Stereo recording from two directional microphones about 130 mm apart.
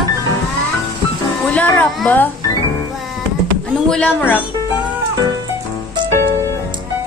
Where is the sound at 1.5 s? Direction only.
10° left (ahead or behind).